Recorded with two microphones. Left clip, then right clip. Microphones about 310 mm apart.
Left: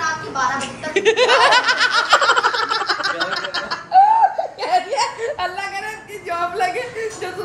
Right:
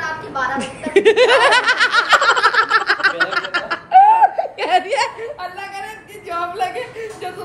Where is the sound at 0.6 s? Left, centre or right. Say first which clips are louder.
Right 4 dB; centre.